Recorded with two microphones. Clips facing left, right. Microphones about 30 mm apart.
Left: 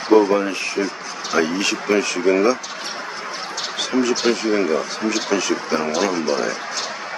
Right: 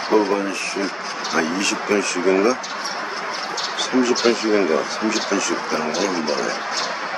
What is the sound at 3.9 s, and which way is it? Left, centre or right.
Speech, centre.